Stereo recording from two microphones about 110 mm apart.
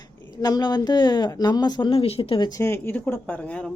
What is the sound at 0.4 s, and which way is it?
Speech, 40° left (ahead or behind).